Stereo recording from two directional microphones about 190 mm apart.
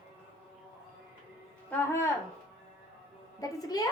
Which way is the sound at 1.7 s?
15° left (ahead or behind).